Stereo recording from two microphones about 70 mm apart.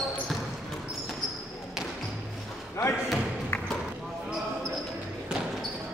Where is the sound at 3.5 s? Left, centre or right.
Left.